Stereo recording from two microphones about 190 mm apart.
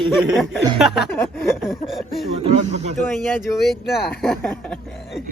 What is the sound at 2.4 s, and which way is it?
Speech, 35° right (ahead or behind).